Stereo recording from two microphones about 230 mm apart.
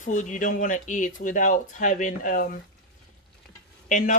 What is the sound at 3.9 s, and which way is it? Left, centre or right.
Speech, left.